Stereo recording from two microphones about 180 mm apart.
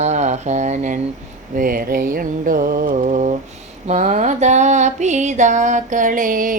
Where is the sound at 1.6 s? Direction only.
50° right (ahead or behind).